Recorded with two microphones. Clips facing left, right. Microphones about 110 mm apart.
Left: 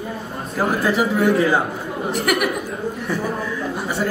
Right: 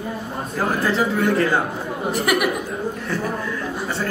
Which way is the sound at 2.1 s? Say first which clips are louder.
Even; centre (ahead or behind).